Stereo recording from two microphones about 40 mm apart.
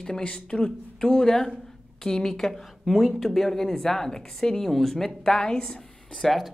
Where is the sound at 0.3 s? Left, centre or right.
Left; by 6.4 s centre.